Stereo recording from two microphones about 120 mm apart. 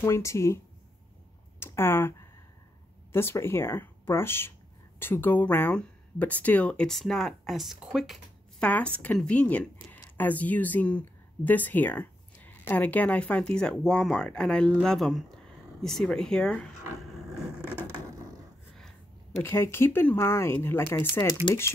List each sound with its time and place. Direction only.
0.0 s speech: 25° left (ahead or behind)
1.6 s speech: 20° left (ahead or behind); by 8.6 s centre (ahead or behind)
8.6 s speech: 10° left (ahead or behind)
18.8 s a sound: 5° left (ahead or behind)
19.4 s speech: 20° left (ahead or behind)